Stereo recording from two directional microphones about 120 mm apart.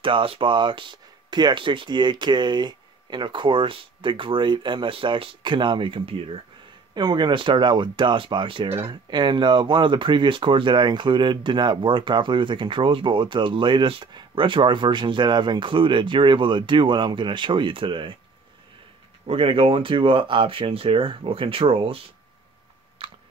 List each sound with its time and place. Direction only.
0.0 s speech: 50° right (ahead or behind)
6.9 s speech: 35° right (ahead or behind)
19.2 s speech: 50° right (ahead or behind)
23.0 s typing: 45° right (ahead or behind)